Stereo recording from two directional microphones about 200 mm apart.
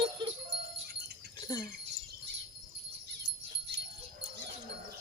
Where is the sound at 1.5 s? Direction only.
20° left (ahead or behind).